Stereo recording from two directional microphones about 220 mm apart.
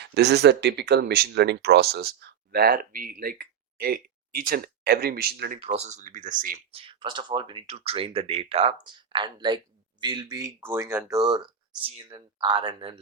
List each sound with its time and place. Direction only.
0.0 s speech: 50° right (ahead or behind)
5.5 s speech: 30° right (ahead or behind)
6.7 s speech: 25° right (ahead or behind)